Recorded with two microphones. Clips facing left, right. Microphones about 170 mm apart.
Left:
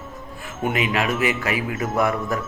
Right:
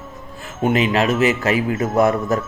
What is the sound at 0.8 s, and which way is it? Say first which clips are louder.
A man's voice: right 5 dB; 25° right (ahead or behind).